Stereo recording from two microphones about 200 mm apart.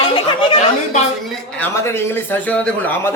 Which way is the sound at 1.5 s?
10° left (ahead or behind).